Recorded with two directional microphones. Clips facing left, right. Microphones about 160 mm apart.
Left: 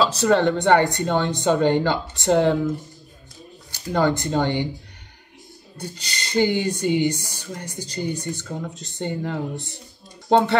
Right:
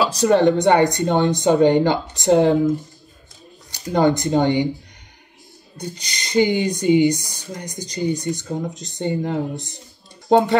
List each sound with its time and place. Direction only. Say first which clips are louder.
0.0 s speech: right 3 dB; 15° right (ahead or behind)
3.7 s speech: right 3 dB; 20° right (ahead or behind)
5.8 s speech: right 2 dB; 15° right (ahead or behind)